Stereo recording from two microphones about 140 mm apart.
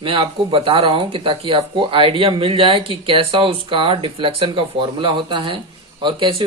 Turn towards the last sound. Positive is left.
turn(degrees=-35)  # may be behind; listen again after turning